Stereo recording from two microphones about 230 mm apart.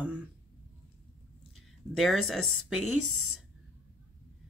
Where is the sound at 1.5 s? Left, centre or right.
Centre.